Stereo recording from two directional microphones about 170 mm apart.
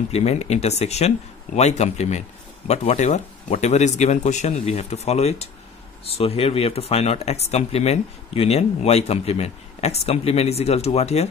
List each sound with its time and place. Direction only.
0.1 s speech: 40° left (ahead or behind)